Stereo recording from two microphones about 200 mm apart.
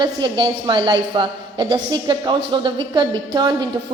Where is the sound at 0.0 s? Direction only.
20° right (ahead or behind).